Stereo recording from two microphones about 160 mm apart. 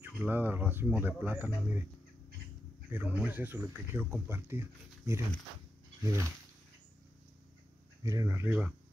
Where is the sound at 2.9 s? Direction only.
10° right (ahead or behind).